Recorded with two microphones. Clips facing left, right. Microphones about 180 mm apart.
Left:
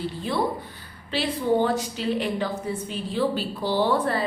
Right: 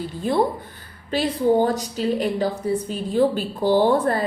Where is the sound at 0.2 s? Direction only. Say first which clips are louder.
Right 7 dB; 45° right (ahead or behind).